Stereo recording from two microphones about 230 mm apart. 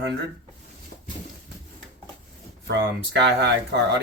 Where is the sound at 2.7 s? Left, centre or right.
Right.